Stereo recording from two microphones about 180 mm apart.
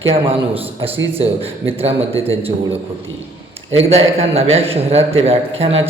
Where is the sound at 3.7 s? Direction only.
35° right (ahead or behind).